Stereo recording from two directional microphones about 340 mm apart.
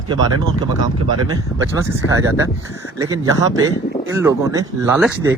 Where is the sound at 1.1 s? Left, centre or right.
Right.